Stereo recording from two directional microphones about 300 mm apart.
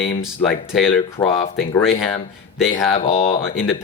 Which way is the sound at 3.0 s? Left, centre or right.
Centre.